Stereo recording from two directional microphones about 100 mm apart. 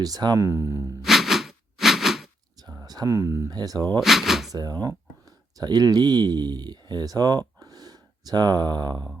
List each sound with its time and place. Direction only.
0.0 s speech: 40° right (ahead or behind)
1.0 s a sound: centre (ahead or behind)
2.8 s speech: 40° right (ahead or behind)
3.5 s speech: 40° right (ahead or behind)
4.0 s speech: 5° right (ahead or behind)
4.5 s speech: 40° right (ahead or behind)